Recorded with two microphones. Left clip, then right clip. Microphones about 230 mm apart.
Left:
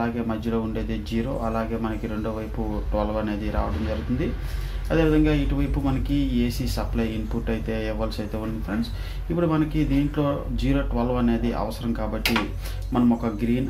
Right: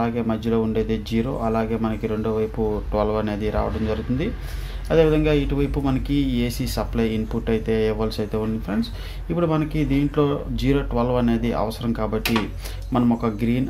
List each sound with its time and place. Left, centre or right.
0.0 s speech: right
4.8 s speech: right